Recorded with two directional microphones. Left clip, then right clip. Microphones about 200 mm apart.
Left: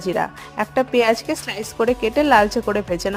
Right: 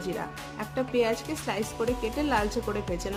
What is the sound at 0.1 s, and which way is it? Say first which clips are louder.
Speech: left 16 dB; 40° left (ahead or behind).